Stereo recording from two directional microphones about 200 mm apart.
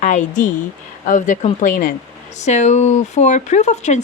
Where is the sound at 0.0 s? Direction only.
40° left (ahead or behind).